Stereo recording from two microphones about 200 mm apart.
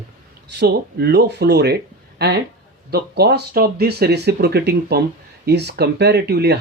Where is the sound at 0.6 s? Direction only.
55° right (ahead or behind).